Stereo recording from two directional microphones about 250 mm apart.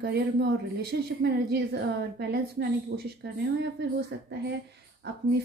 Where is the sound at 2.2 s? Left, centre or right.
Right.